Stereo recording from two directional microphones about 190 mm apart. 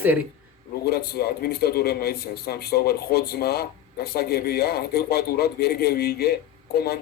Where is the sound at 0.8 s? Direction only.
55° left (ahead or behind).